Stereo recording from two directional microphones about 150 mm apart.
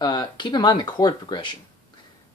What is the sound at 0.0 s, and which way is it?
Speech, 30° left (ahead or behind).